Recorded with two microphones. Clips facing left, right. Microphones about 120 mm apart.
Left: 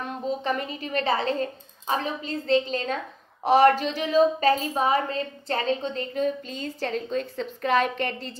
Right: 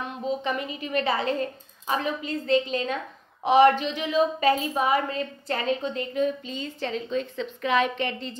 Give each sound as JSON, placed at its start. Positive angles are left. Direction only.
{"t": 0.0, "sound": "a woman's voice", "side_deg": 40}